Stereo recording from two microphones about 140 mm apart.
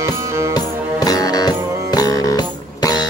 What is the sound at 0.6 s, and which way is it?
Music, 25° left (ahead or behind).